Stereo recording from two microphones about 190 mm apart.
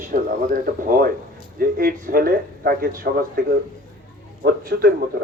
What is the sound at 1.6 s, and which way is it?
A man's voice, 50° right (ahead or behind).